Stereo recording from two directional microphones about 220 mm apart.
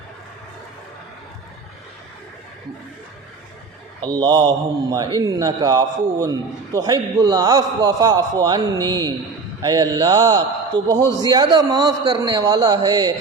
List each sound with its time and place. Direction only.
4.0 s a man's voice: 20° right (ahead or behind)
10.7 s a man's voice: 5° left (ahead or behind)
11.2 s a man's voice: 20° right (ahead or behind)